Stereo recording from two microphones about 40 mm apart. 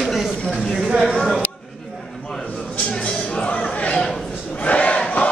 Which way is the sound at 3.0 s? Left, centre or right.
Left.